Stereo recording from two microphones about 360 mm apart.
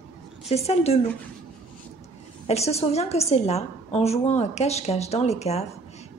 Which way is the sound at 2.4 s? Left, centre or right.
Centre.